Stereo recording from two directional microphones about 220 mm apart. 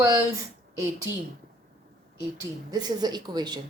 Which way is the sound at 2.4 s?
20° right (ahead or behind).